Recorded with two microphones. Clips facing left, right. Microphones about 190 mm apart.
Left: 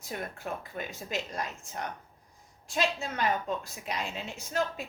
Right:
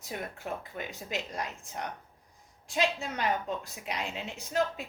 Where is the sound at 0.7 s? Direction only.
15° right (ahead or behind).